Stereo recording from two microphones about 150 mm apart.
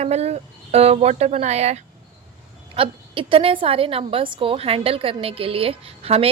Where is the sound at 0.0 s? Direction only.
45° right (ahead or behind).